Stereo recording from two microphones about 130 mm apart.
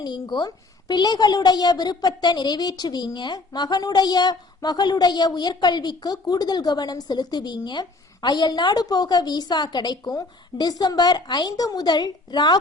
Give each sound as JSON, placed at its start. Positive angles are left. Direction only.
{"t": 0.0, "sound": "a woman's voice", "side_deg": 35}